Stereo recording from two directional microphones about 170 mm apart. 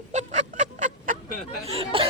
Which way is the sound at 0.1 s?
45° right (ahead or behind).